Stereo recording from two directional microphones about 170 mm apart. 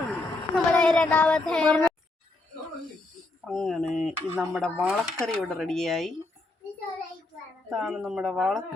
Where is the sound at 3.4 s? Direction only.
Centre (ahead or behind).